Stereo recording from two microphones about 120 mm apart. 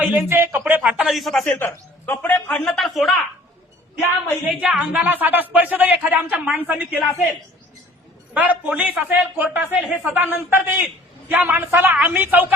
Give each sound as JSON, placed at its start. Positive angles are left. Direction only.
{"t": 0.0, "sound": "speech", "side_deg": -15}
{"t": 0.9, "sound": "a man's voice", "side_deg": 0}
{"t": 1.5, "sound": "a man's voice", "side_deg": 20}
{"t": 4.4, "sound": "speech", "side_deg": -10}
{"t": 8.3, "sound": "speech", "side_deg": -10}